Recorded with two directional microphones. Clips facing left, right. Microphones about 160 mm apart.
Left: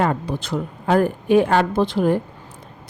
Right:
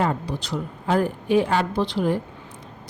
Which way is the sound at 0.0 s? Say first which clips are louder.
Left 3 dB; 60° left (ahead or behind).